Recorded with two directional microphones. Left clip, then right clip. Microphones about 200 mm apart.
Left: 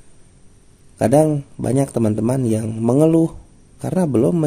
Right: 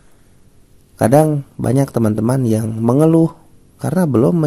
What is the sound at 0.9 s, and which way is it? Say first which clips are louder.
A man's voice: right 2 dB; 20° right (ahead or behind).